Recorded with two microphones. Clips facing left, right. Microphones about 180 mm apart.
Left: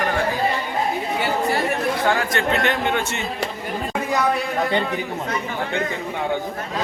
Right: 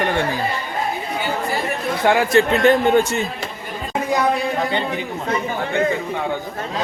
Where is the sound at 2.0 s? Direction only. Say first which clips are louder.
Right 9 dB; 25° right (ahead or behind).